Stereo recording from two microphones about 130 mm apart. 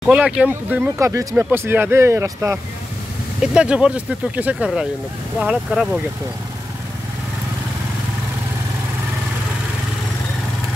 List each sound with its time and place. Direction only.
0.0 s speech: 10° right (ahead or behind)
3.5 s speech: 5° right (ahead or behind)